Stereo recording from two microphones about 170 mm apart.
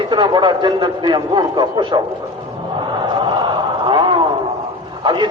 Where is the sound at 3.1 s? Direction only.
25° right (ahead or behind).